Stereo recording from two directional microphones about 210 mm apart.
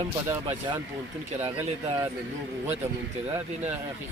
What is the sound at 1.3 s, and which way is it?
Speech, 30° right (ahead or behind).